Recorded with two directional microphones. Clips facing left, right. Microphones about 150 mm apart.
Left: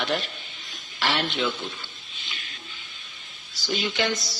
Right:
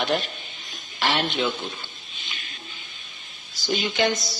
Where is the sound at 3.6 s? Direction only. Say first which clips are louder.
Right 3 dB; 15° right (ahead or behind).